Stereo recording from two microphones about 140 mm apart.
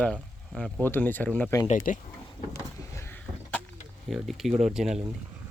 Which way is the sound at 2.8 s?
20° left (ahead or behind).